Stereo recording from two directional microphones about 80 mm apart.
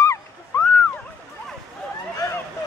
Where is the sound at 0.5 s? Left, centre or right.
Left.